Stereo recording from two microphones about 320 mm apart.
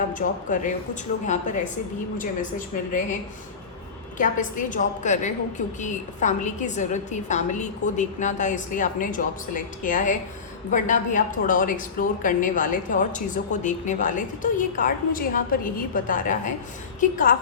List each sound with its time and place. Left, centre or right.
0.1 s a woman's voice: left
2.1 s a woman's voice: left
4.2 s a woman's voice: left